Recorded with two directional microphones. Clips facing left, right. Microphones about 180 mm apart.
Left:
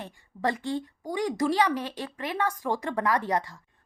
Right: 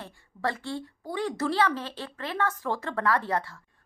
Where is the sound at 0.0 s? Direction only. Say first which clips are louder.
Left 2 dB; 15° left (ahead or behind).